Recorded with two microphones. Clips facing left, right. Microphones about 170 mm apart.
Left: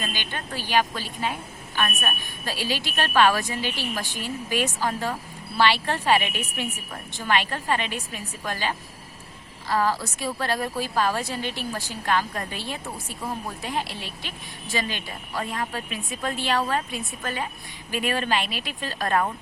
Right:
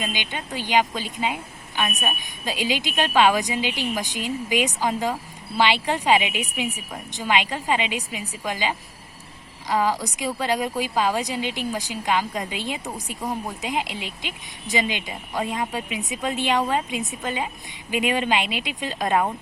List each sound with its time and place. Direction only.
0.0 s a woman's voice: 15° right (ahead or behind)